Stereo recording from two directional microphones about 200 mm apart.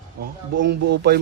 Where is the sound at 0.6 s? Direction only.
55° right (ahead or behind).